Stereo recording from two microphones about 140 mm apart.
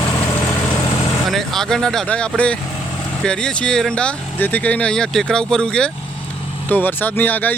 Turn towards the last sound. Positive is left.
turn(degrees=10)  # may be behind; listen again after turning